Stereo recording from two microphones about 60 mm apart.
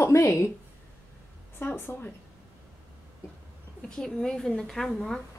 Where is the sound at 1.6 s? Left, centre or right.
Left.